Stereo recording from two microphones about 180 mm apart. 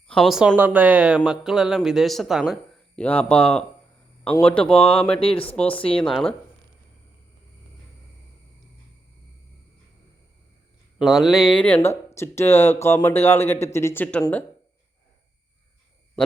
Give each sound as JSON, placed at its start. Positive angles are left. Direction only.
{"t": 0.1, "sound": "speech", "side_deg": 0}
{"t": 5.2, "sound": "speech", "side_deg": 30}
{"t": 5.5, "sound": "speech", "side_deg": 10}
{"t": 10.9, "sound": "speech", "side_deg": 0}